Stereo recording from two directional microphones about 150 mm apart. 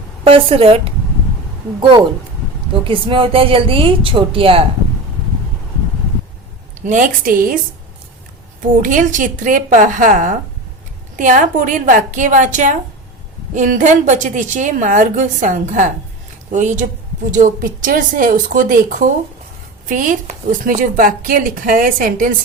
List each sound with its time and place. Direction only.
0.3 s a woman's voice: 40° right (ahead or behind)
2.8 s a woman's voice: 35° right (ahead or behind)
6.8 s a woman's voice: 60° right (ahead or behind)
8.8 s a woman's voice: 60° right (ahead or behind)